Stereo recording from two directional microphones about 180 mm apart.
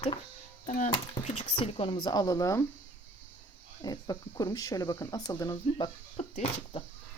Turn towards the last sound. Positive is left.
turn(degrees=35)  # may be behind; listen again after turning